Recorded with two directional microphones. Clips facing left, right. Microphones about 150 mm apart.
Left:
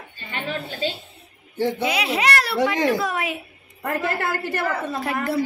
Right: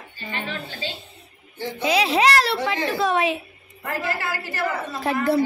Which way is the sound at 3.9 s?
55° left (ahead or behind).